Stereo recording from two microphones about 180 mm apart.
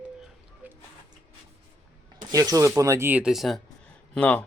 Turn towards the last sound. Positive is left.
turn(degrees=10)  # may be behind; listen again after turning